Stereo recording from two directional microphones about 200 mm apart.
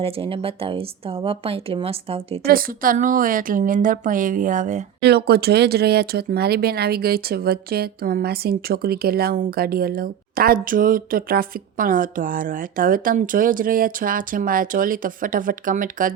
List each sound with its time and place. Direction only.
0.0 s speech: 25° right (ahead or behind)
2.5 s a woman's voice: 45° right (ahead or behind)
5.0 s speech: 55° right (ahead or behind)